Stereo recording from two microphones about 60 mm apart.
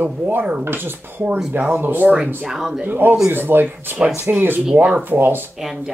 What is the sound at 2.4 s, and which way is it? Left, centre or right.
Speech, centre.